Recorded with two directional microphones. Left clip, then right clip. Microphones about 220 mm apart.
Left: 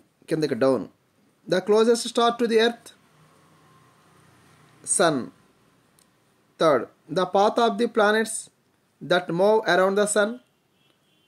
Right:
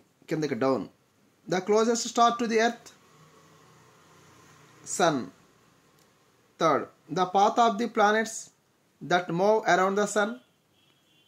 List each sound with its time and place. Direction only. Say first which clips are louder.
0.2 s speech: left 5 dB; 20° left (ahead or behind)
4.8 s speech: left 3 dB; 20° left (ahead or behind)
6.5 s speech: left 4 dB; 20° left (ahead or behind)